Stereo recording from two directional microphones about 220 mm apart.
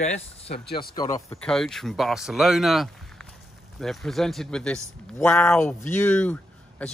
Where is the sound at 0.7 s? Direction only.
45° left (ahead or behind).